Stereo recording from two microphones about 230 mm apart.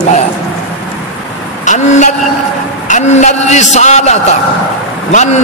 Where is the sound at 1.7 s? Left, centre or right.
Left.